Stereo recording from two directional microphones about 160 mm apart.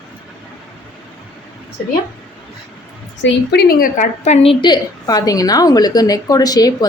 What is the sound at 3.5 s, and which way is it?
A woman's voice, 80° left.